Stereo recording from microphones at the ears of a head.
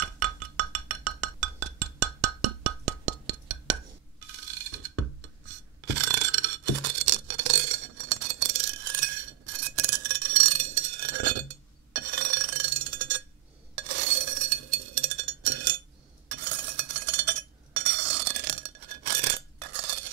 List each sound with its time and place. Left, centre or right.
0.0 s music: right
13.7 s a sound: right
16.3 s chink: right